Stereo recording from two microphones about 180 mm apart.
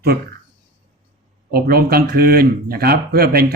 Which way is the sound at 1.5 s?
60° right (ahead or behind).